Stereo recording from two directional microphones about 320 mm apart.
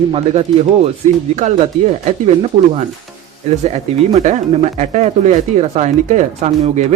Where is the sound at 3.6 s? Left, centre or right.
Right.